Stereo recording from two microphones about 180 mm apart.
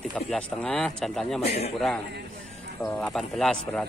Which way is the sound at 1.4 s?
35° left (ahead or behind).